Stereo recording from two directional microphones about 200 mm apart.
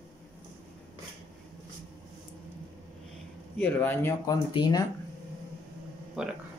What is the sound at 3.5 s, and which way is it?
Speech, 10° left (ahead or behind).